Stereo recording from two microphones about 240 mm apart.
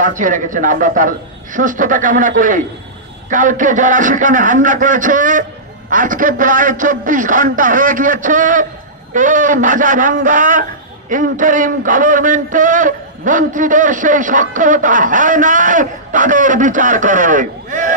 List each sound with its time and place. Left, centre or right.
0.0 s a man's voice: right